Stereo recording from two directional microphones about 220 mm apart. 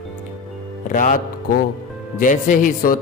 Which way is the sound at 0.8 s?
35° left (ahead or behind).